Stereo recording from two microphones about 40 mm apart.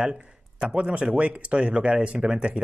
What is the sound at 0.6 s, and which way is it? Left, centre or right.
Speech, right.